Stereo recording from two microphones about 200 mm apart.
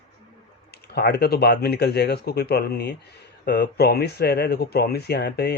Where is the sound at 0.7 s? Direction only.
55° left (ahead or behind).